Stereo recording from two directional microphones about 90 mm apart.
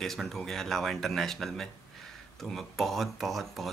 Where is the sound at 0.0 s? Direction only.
5° left (ahead or behind).